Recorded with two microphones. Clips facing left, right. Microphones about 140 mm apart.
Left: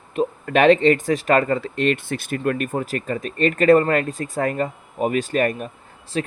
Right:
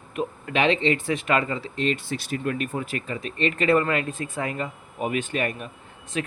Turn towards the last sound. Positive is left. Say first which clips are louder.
# left 4 dB
turn(degrees=35)  # may be behind; listen again after turning